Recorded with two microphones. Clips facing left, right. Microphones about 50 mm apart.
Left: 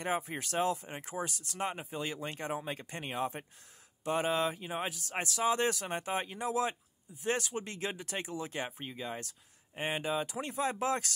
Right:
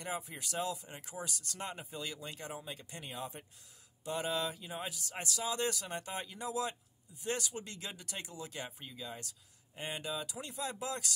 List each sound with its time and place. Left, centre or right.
0.0 s speech: left
2.2 s speech: left
4.0 s speech: left